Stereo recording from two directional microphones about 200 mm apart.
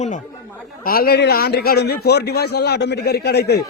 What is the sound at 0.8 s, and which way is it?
A man's voice, 50° left (ahead or behind).